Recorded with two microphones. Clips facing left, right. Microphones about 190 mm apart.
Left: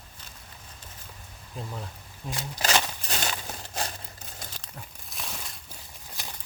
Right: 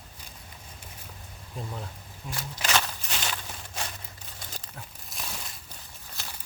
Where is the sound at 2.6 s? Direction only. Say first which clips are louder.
Left 2 dB; 35° left (ahead or behind).